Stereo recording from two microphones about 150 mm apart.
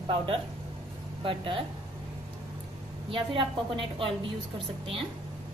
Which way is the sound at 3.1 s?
35° right (ahead or behind).